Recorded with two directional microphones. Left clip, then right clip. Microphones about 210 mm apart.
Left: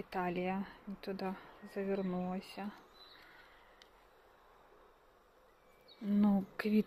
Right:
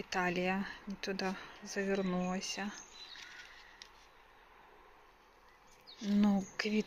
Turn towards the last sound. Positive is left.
turn(degrees=25)  # may be behind; listen again after turning